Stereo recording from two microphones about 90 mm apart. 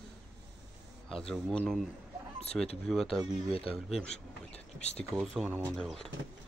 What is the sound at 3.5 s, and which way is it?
Speech, 90° left.